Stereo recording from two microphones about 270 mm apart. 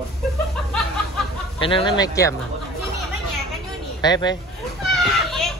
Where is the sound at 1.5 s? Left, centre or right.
Centre.